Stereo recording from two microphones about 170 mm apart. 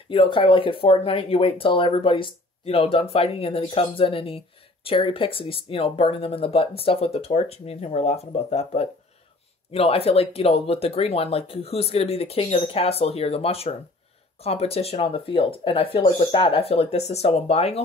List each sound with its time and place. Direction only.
0.1 s speech: 30° left (ahead or behind)